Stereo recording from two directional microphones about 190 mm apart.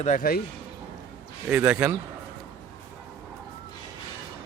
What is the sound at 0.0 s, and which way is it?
Speech, 45° left (ahead or behind).